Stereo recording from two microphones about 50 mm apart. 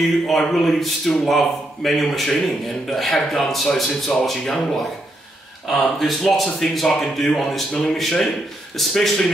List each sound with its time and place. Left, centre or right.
0.3 s a man's voice: centre